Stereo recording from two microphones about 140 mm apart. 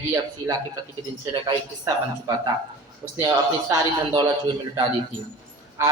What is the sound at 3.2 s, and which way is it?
A man's voice, 25° right (ahead or behind).